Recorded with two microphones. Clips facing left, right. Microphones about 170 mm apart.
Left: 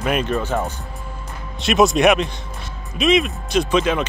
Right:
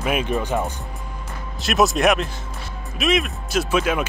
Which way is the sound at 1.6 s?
Centre (ahead or behind).